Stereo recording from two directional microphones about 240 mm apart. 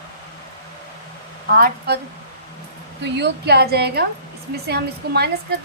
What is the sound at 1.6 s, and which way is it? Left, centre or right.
Speech, right.